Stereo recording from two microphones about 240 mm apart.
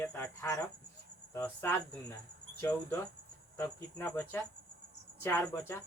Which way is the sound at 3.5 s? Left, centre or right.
Centre.